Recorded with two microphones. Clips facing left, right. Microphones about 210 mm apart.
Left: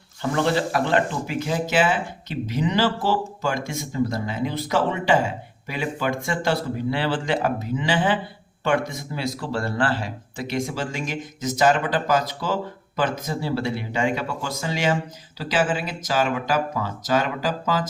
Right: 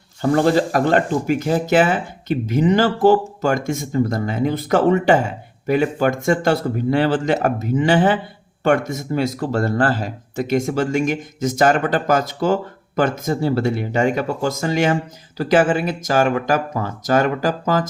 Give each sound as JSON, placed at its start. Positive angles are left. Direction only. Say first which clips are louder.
{"t": 0.2, "sound": "speech", "louder": "right 6 dB", "side_deg": -40}